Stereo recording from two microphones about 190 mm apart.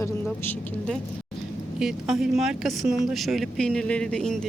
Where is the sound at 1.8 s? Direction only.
Centre (ahead or behind).